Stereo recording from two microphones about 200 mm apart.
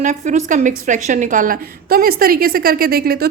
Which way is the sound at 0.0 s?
40° right (ahead or behind).